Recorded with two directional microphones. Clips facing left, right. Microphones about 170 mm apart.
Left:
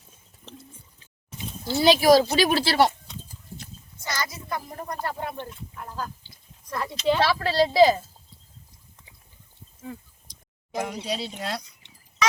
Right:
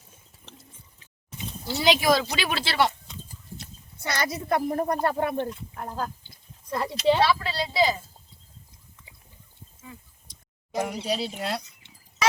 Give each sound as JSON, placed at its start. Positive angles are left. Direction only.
{"t": 1.8, "sound": "speech", "side_deg": 35}
{"t": 4.0, "sound": "a woman's voice", "side_deg": -65}
{"t": 6.7, "sound": "speech", "side_deg": -25}
{"t": 7.3, "sound": "speech", "side_deg": 60}
{"t": 10.8, "sound": "speech", "side_deg": -10}